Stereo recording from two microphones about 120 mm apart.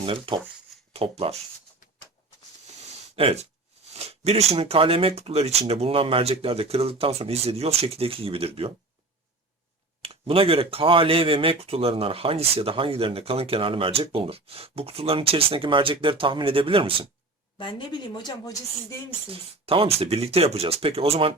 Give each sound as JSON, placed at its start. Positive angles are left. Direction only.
{"t": 0.0, "sound": "speech", "side_deg": -50}
{"t": 2.6, "sound": "a sound", "side_deg": -60}
{"t": 3.9, "sound": "speech", "side_deg": -65}
{"t": 10.0, "sound": "speech", "side_deg": -55}
{"t": 17.6, "sound": "a woman's voice", "side_deg": 40}
{"t": 19.3, "sound": "speech", "side_deg": -50}